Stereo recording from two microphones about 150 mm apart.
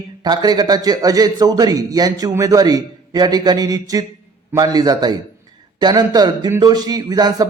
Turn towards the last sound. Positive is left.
turn(degrees=-25)  # may be behind; listen again after turning